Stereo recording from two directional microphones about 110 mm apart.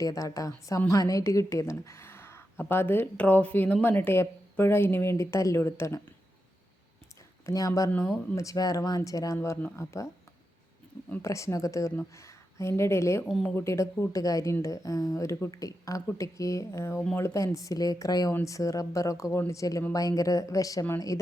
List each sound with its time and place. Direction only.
0.0 s a woman's voice: 35° left (ahead or behind)
7.4 s speech: 30° left (ahead or behind)
11.1 s a woman's voice: 25° left (ahead or behind)
13.2 s a woman's voice: centre (ahead or behind)
13.6 s a woman's voice: 25° left (ahead or behind)